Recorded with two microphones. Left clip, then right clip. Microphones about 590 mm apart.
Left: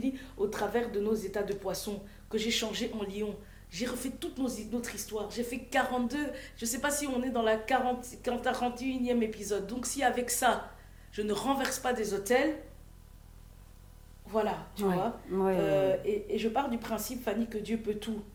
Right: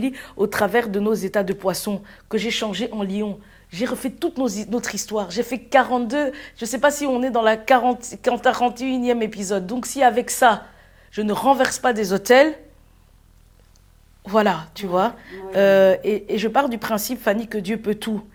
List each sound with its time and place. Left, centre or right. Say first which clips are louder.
0.0 s a man's voice: right 10 dB; right
14.3 s speech: right 13 dB; right